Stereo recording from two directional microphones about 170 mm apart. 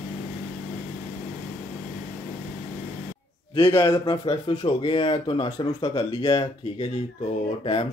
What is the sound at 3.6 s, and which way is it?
Speech, 20° left (ahead or behind).